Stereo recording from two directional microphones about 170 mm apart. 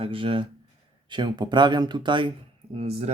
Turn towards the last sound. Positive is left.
turn(degrees=-35)  # may be behind; listen again after turning